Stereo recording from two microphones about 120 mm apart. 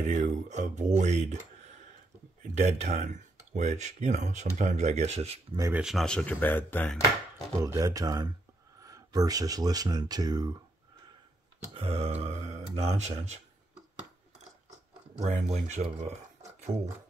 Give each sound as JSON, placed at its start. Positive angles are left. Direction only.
{"t": 0.0, "sound": "speech", "side_deg": -85}
{"t": 2.4, "sound": "speech", "side_deg": -65}
{"t": 5.7, "sound": "speech", "side_deg": -5}
{"t": 6.0, "sound": "speech", "side_deg": 10}
{"t": 7.5, "sound": "speech", "side_deg": -25}
{"t": 11.7, "sound": "speech", "side_deg": -55}
{"t": 15.1, "sound": "speech", "side_deg": -75}